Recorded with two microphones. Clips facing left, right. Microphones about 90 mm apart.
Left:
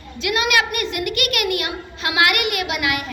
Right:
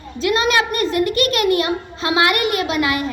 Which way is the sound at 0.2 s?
35° right (ahead or behind).